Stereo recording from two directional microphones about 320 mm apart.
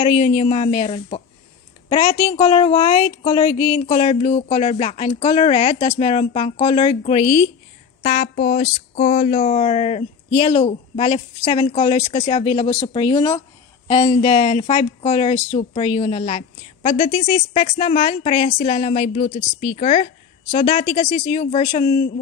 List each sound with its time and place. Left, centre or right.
0.0 s speech: centre